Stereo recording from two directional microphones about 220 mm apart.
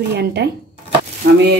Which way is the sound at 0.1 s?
50° right (ahead or behind).